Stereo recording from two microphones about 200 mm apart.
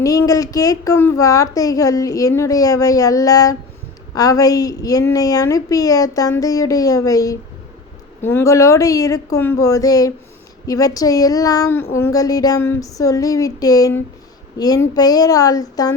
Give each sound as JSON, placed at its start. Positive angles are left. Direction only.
{"t": 0.0, "sound": "a child's voice", "side_deg": 15}